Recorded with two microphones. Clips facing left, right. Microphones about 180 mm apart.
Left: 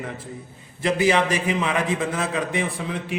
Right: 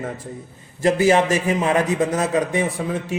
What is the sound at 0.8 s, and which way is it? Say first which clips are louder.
A man's voice: right 4 dB; 45° right (ahead or behind).